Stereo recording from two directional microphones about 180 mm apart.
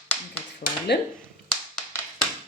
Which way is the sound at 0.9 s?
65° left (ahead or behind).